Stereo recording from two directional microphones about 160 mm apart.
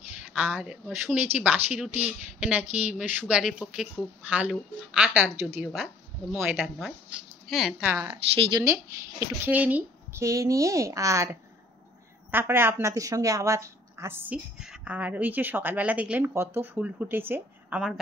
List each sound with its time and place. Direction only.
0.4 s speech: 10° right (ahead or behind)
7.9 s speech: 15° right (ahead or behind)
9.2 s a woman's voice: 10° right (ahead or behind)